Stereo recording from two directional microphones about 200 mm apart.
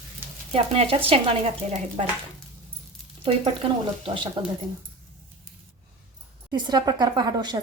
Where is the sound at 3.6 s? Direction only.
25° right (ahead or behind).